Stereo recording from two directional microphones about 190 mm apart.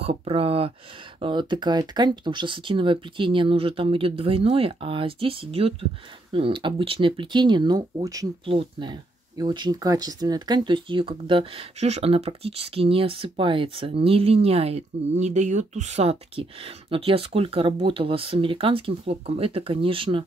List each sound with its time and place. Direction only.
0.0 s speech: 30° right (ahead or behind)